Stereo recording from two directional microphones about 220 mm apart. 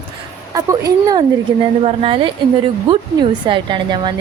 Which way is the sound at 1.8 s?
25° right (ahead or behind).